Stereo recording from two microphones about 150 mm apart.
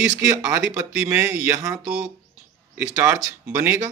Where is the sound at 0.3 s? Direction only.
15° right (ahead or behind).